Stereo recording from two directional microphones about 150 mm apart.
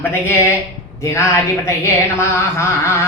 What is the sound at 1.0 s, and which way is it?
Speech, 20° left (ahead or behind).